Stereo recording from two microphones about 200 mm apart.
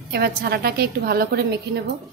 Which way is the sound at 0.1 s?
50° right (ahead or behind).